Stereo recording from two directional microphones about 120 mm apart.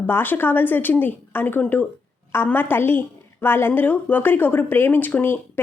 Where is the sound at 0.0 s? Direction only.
15° left (ahead or behind).